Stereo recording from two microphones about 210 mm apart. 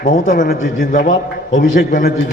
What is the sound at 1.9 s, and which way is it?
Speech, 45° left (ahead or behind).